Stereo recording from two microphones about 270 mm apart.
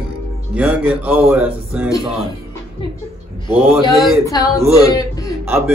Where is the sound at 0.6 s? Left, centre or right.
Centre.